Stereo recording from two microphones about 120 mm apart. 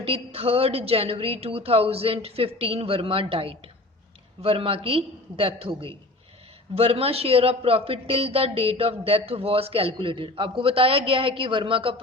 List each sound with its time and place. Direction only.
0.0 s a man's voice: 55° right (ahead or behind)